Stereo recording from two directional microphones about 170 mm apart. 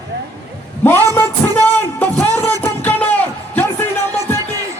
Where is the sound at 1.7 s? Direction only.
10° left (ahead or behind).